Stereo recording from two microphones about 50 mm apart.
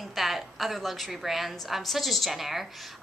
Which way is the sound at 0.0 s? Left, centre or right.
Centre.